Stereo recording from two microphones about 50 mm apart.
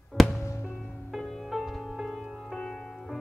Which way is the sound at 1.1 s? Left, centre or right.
Centre.